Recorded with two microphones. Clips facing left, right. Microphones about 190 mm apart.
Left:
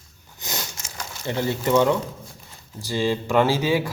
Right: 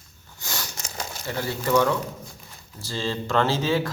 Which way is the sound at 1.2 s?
20° left (ahead or behind).